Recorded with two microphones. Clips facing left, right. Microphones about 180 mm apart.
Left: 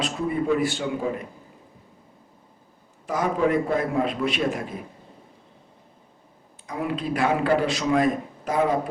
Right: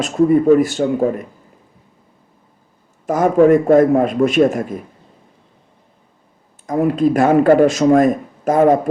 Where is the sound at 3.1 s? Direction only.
45° right (ahead or behind).